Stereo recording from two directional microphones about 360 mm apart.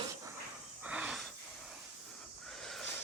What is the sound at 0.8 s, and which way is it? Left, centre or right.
Wheeze, centre.